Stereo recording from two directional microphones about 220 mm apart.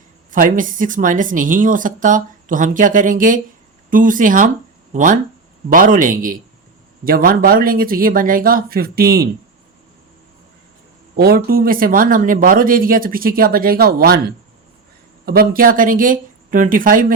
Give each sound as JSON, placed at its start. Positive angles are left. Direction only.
{"t": 0.3, "sound": "a woman's voice", "side_deg": -40}
{"t": 11.2, "sound": "a woman's voice", "side_deg": -45}
{"t": 15.3, "sound": "a woman's voice", "side_deg": -40}